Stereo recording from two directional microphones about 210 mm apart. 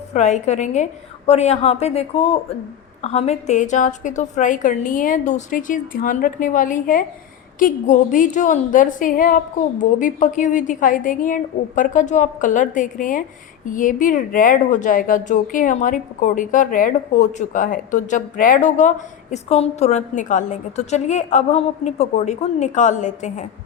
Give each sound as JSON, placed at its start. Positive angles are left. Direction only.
{"t": 0.1, "sound": "speech", "side_deg": 35}